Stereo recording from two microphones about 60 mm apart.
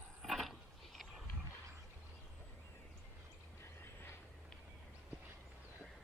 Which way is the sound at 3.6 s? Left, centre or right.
Left.